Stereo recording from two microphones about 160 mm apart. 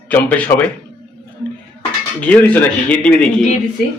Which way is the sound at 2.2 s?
10° left (ahead or behind).